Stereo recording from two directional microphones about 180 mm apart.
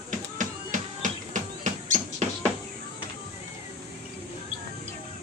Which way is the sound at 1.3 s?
40° right (ahead or behind).